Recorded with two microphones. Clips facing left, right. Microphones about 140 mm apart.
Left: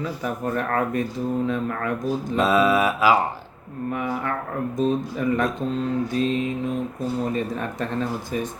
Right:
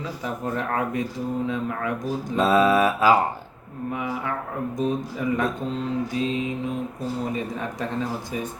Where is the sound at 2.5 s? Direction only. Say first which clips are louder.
Right 1 dB; 35° right (ahead or behind).